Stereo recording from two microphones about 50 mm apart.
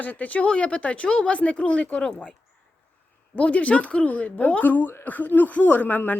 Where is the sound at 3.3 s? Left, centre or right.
Left.